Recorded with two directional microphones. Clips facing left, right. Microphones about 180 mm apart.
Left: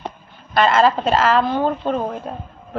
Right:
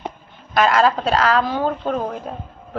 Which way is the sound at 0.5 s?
Centre (ahead or behind).